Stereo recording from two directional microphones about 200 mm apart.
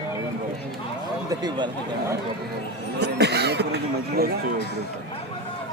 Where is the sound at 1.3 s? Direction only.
20° right (ahead or behind).